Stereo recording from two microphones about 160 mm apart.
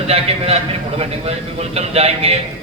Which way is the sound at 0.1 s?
40° right (ahead or behind).